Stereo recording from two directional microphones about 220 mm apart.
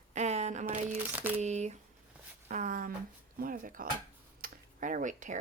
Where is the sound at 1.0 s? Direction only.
10° right (ahead or behind).